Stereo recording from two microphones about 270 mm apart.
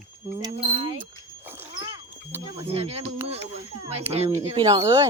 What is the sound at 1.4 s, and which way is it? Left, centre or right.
Cat, centre.